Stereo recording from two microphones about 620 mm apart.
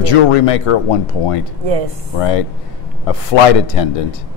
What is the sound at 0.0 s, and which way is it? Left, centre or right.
Speech, left.